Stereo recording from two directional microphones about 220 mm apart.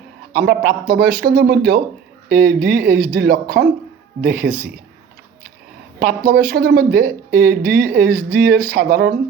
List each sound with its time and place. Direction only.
0.4 s a man's voice: 45° right (ahead or behind)
6.0 s speech: 45° right (ahead or behind)